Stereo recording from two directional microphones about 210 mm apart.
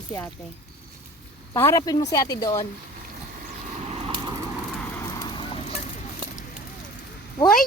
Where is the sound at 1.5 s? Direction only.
15° left (ahead or behind).